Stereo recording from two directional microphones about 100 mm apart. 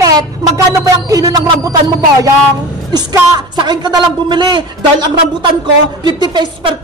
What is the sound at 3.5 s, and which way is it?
A man's voice, 45° right (ahead or behind).